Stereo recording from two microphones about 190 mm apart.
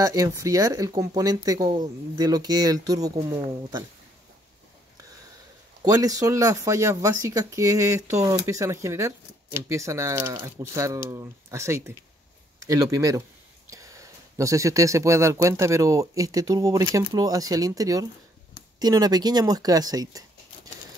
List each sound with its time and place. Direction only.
0.0 s speech: 20° right (ahead or behind)
5.9 s speech: 20° right (ahead or behind)